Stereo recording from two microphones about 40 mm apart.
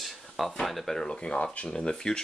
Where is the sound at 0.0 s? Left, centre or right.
Centre.